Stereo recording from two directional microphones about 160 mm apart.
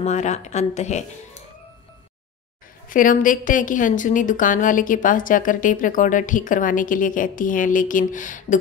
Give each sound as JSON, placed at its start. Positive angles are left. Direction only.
{"t": 0.0, "sound": "speech", "side_deg": 45}
{"t": 2.9, "sound": "a woman's voice", "side_deg": 60}